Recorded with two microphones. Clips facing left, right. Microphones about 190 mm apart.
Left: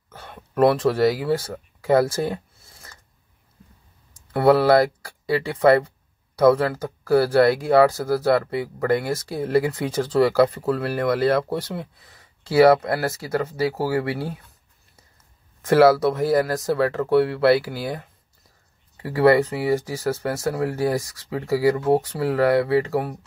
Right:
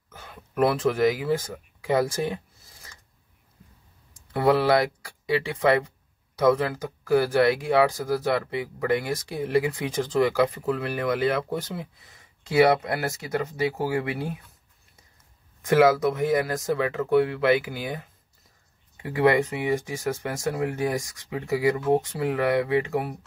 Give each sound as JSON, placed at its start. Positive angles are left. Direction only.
{"t": 0.2, "sound": "a sound", "side_deg": 35}
{"t": 0.8, "sound": "speech", "side_deg": 35}
{"t": 4.4, "sound": "speech", "side_deg": 35}
{"t": 7.1, "sound": "speech", "side_deg": 35}
{"t": 15.7, "sound": "speech", "side_deg": 35}
{"t": 19.0, "sound": "speech", "side_deg": 35}